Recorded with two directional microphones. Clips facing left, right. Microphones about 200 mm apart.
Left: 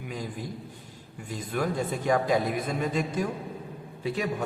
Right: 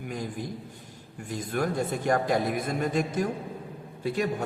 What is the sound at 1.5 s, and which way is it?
A man's voice, 50° right (ahead or behind).